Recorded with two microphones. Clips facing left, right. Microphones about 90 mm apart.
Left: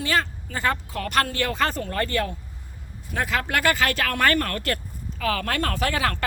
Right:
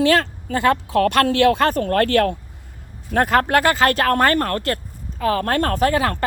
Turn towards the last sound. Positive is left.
turn(degrees=-50)  # may be behind; listen again after turning